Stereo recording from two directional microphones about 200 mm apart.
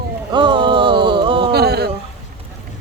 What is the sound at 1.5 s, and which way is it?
Speech, 50° right (ahead or behind).